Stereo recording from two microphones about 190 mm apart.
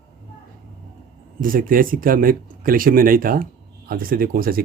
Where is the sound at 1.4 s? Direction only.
45° right (ahead or behind).